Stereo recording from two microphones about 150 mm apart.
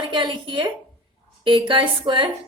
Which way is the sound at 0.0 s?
30° right (ahead or behind).